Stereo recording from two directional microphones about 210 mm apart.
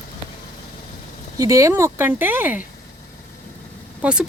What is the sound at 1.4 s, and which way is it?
Speech, 15° right (ahead or behind).